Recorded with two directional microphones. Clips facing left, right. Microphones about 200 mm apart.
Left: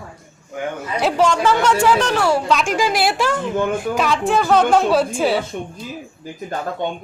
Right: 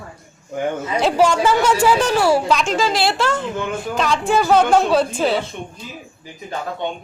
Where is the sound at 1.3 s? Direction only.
5° right (ahead or behind).